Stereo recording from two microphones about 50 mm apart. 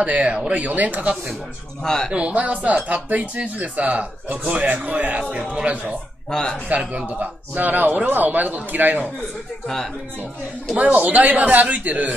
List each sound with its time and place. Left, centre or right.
0.0 s speech: right
1.8 s a man's voice: centre
2.1 s speech: right
5.3 s speech: centre
6.3 s a man's voice: centre
6.7 s speech: right
7.5 s a man's voice: right
10.8 s a man's voice: right